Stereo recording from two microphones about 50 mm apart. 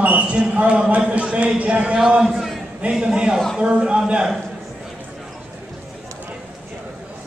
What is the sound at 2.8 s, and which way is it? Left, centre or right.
A man's voice, centre.